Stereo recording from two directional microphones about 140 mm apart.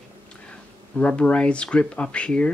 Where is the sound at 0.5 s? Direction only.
10° left (ahead or behind).